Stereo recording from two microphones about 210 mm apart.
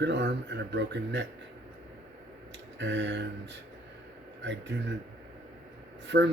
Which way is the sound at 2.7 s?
60° right (ahead or behind).